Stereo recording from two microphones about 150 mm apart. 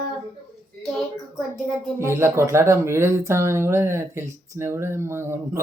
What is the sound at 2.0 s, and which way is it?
Speech, 15° right (ahead or behind).